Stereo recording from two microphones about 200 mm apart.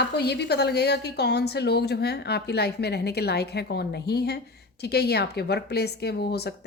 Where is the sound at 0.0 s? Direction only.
55° left (ahead or behind).